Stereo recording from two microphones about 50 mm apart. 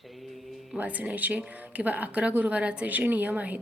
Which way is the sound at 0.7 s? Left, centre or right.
Right.